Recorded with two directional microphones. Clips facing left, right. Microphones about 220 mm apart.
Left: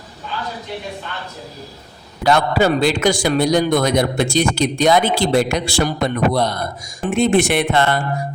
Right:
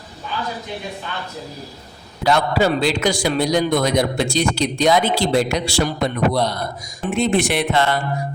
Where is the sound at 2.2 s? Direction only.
50° left (ahead or behind).